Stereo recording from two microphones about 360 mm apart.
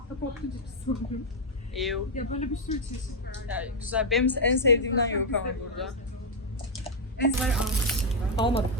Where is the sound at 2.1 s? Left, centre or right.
Centre.